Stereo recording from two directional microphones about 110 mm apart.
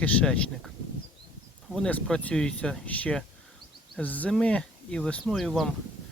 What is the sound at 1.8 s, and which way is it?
Speech, 5° left (ahead or behind).